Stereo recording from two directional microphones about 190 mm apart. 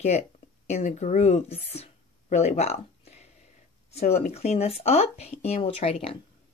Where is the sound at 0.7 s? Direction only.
35° left (ahead or behind).